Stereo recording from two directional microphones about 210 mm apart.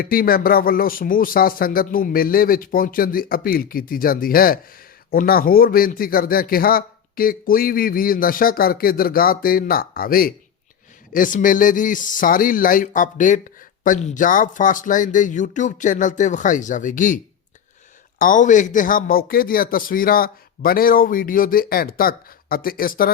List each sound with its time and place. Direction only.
0.0 s a man's voice: 45° left (ahead or behind)
18.2 s a man's voice: 40° left (ahead or behind)